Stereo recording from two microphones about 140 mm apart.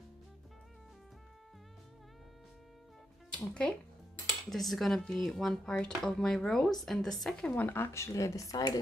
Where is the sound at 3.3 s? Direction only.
10° left (ahead or behind).